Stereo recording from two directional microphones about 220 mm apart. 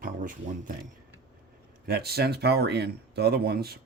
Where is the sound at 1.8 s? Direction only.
45° right (ahead or behind).